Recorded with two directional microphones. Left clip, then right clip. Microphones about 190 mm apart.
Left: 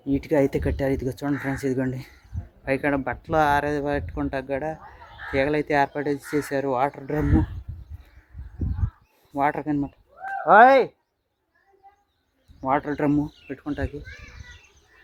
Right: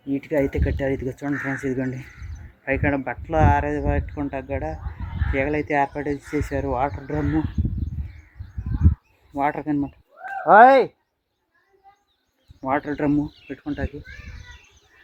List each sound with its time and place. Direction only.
0.0 s speech: 20° left (ahead or behind)
9.3 s bird: centre (ahead or behind)
10.4 s speech: 15° right (ahead or behind)
12.5 s speech: centre (ahead or behind)